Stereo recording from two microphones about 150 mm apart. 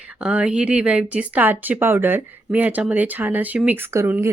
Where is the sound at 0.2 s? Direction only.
5° right (ahead or behind).